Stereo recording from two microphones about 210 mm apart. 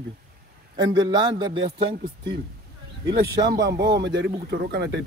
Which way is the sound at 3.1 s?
20° right (ahead or behind).